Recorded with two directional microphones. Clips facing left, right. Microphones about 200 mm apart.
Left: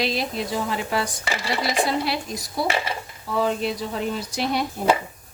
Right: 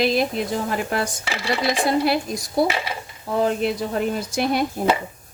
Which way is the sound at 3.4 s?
55° right (ahead or behind).